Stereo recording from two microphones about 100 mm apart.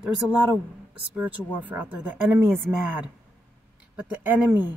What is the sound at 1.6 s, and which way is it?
Speech, 15° right (ahead or behind).